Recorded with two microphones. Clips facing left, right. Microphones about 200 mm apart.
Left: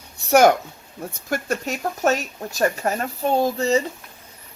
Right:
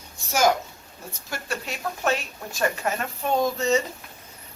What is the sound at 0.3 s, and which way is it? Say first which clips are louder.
Speech: left 7 dB; 60° left (ahead or behind).